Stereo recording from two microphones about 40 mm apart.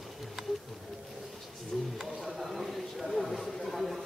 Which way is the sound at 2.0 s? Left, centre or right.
Centre.